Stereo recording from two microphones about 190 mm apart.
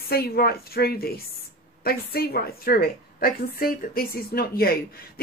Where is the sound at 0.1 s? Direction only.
55° left (ahead or behind).